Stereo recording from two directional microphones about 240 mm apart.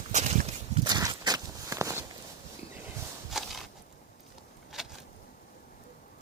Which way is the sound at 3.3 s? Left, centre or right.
Centre.